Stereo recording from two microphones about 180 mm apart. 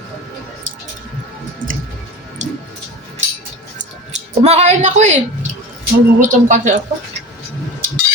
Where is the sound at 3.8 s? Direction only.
40° right (ahead or behind).